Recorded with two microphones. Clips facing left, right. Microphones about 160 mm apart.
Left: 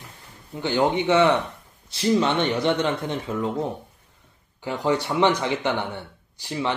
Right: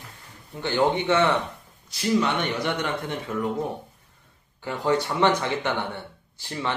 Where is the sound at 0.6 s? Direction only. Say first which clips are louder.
Left 1 dB; 15° left (ahead or behind).